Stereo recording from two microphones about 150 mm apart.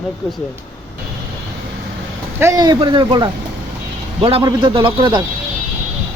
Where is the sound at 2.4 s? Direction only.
25° right (ahead or behind).